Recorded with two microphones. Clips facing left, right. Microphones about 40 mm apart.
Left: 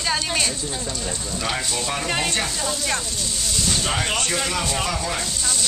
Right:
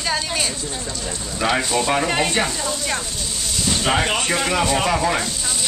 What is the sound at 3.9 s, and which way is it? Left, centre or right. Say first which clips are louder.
Speech: right 4 dB; centre.